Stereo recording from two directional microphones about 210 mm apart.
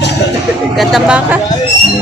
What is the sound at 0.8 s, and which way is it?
Speech, 5° right (ahead or behind).